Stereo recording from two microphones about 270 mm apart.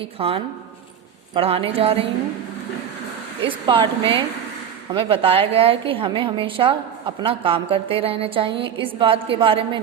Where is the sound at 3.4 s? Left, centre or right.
Centre.